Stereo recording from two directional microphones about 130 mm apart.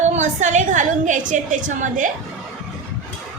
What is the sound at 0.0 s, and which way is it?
A woman's voice, 65° right (ahead or behind).